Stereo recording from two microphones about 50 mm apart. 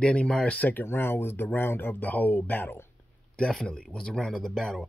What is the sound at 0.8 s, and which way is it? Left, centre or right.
Speech, left.